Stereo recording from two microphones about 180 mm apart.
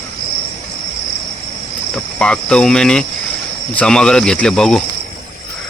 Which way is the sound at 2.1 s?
5° left (ahead or behind).